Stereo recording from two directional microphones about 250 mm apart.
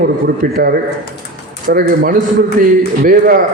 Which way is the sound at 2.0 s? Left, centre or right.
Right.